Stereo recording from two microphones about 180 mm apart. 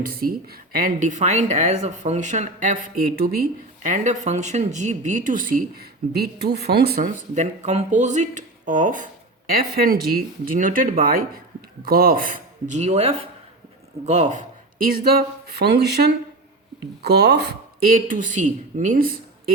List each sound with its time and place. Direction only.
0.0 s speech: 55° right (ahead or behind)
7.3 s a man's voice: 40° right (ahead or behind)
14.9 s a sound: 60° right (ahead or behind)
18.1 s speech: 45° right (ahead or behind)